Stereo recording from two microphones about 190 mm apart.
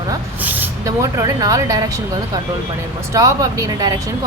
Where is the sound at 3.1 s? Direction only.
15° right (ahead or behind).